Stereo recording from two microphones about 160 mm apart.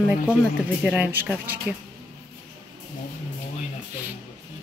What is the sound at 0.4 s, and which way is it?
Speech, 5° right (ahead or behind).